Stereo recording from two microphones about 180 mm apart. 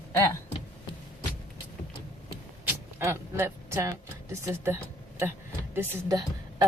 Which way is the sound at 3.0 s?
15° right (ahead or behind).